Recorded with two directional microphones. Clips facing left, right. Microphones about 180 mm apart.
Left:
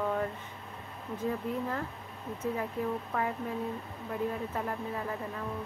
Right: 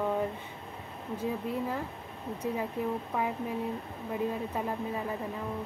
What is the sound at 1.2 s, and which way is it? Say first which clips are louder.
Speech: even; 10° right (ahead or behind).